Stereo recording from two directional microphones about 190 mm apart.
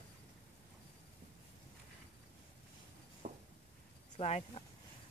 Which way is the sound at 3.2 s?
40° right (ahead or behind).